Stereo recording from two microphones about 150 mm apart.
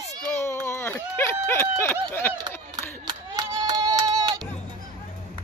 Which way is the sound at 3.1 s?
25° right (ahead or behind).